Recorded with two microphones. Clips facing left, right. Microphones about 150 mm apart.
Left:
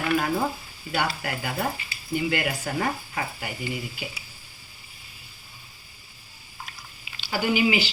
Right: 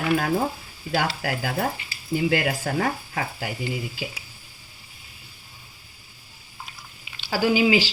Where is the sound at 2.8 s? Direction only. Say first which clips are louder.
Right 2 dB; 80° right.